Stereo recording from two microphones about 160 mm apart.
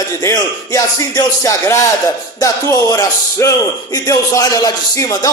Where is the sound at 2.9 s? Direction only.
20° left (ahead or behind).